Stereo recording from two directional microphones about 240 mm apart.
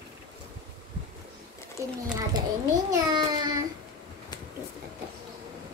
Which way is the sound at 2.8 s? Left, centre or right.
Centre.